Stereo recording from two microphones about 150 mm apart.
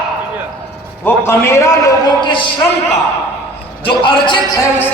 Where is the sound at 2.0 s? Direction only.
30° left (ahead or behind).